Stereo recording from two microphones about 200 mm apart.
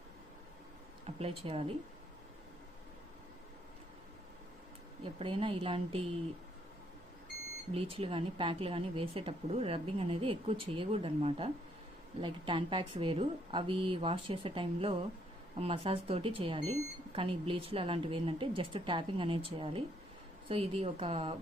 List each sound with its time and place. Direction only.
1.0 s speech: 30° right (ahead or behind)
5.0 s speech: 25° right (ahead or behind)
7.7 s speech: 25° right (ahead or behind)